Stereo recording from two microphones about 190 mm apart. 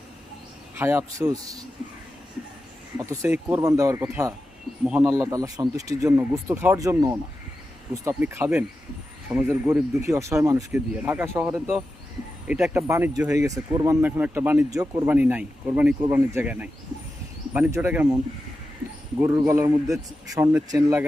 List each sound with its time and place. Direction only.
0.8 s speech: 15° right (ahead or behind)
3.0 s speech: 15° right (ahead or behind)
5.1 s speech: 15° right (ahead or behind)
19.2 s speech: 10° right (ahead or behind)